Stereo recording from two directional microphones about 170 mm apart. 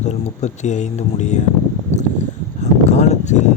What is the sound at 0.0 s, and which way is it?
Speech, 45° left (ahead or behind).